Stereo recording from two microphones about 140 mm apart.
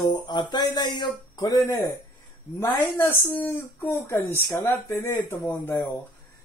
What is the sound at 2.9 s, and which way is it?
Speech, 15° left (ahead or behind).